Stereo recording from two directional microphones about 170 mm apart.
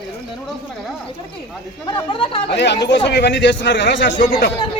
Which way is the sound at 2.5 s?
90° left.